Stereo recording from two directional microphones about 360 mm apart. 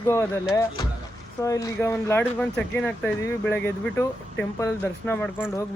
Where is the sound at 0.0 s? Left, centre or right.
Centre.